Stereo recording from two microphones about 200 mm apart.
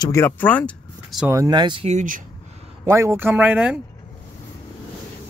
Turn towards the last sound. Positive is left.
turn(degrees=-5)  # may be behind; listen again after turning